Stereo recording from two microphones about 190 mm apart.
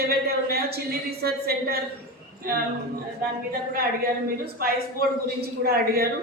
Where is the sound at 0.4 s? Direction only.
55° right (ahead or behind).